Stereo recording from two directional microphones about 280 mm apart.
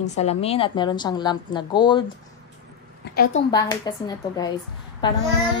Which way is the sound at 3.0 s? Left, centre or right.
Left.